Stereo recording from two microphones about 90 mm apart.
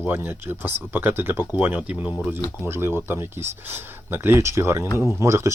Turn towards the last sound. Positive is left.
turn(degrees=-30)  # may be behind; listen again after turning